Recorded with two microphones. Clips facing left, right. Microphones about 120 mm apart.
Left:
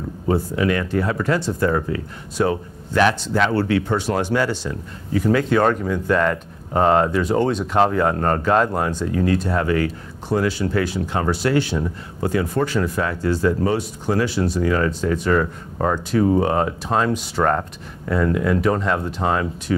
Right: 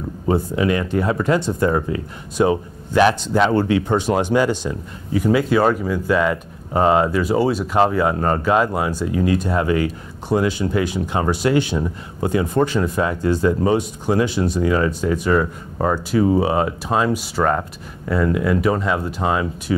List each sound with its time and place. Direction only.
0.3 s speech: 20° right (ahead or behind); by 19.4 s 5° right (ahead or behind)